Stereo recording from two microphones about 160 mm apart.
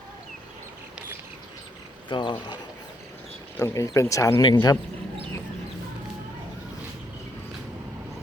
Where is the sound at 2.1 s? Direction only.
30° left (ahead or behind).